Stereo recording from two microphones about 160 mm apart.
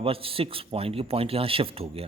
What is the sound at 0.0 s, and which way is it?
A man's voice, 35° right (ahead or behind).